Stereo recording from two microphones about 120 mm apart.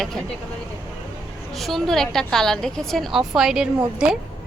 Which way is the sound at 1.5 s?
Centre (ahead or behind).